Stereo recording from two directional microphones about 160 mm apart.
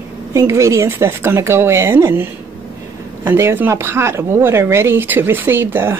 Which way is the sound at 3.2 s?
15° right (ahead or behind).